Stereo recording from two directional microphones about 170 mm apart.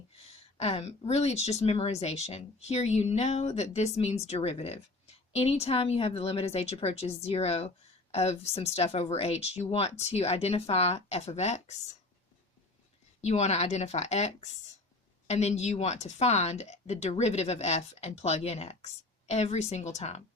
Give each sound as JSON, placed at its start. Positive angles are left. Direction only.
{"t": 0.5, "sound": "a woman's voice", "side_deg": 35}
{"t": 13.2, "sound": "a woman's voice", "side_deg": 40}